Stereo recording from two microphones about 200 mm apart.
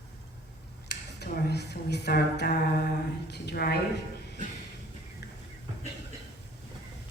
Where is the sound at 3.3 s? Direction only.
55° left (ahead or behind).